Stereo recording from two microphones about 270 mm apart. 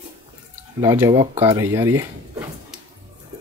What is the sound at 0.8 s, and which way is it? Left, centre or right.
Speech, centre.